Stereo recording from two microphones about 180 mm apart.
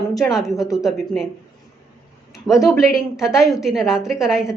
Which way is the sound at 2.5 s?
Centre (ahead or behind).